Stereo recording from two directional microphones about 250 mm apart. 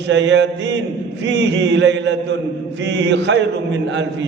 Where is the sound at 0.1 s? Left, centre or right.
Right.